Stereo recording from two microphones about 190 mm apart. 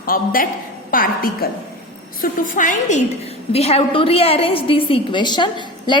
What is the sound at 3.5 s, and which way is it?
A woman's voice, 30° left (ahead or behind).